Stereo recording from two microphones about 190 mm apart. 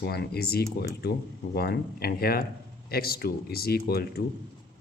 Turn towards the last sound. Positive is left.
turn(degrees=55)  # may be behind; listen again after turning